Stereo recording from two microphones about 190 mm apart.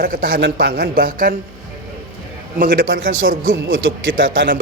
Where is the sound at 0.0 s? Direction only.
50° right (ahead or behind).